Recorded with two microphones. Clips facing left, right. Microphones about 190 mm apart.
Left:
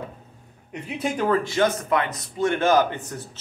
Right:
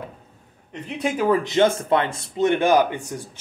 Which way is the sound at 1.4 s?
25° right (ahead or behind).